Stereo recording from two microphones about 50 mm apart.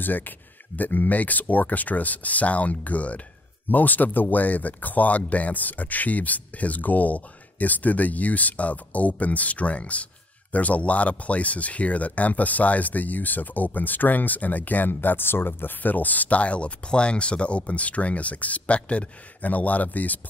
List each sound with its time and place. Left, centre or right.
0.0 s speech: left